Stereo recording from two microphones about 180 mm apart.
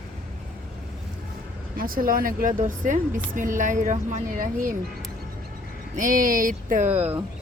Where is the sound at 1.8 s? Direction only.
50° right (ahead or behind).